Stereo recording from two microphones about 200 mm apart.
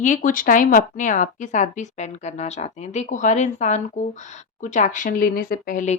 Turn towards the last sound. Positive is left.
turn(degrees=40)  # may be behind; listen again after turning